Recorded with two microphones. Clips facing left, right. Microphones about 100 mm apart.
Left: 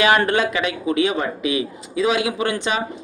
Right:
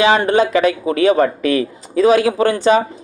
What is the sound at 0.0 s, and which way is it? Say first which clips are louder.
Speech: right 4 dB; 25° right (ahead or behind).